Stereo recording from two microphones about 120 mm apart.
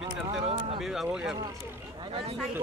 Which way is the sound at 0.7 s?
5° right (ahead or behind).